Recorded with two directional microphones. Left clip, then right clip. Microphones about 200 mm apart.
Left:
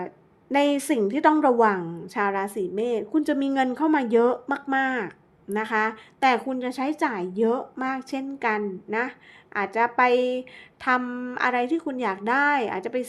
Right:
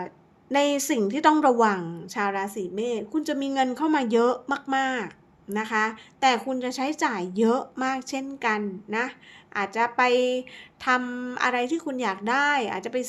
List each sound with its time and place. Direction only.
0.5 s a woman's voice: 10° left (ahead or behind)